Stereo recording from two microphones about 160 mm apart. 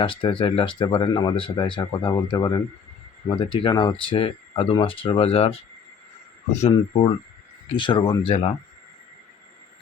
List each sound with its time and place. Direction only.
0.0 s speech: 30° left (ahead or behind)
6.6 s speech: 35° left (ahead or behind)